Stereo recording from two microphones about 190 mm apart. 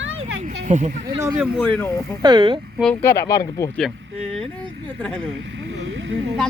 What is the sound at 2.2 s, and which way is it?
Speech, 25° right (ahead or behind).